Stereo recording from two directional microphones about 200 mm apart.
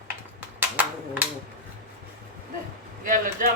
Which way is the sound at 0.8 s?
10° right (ahead or behind).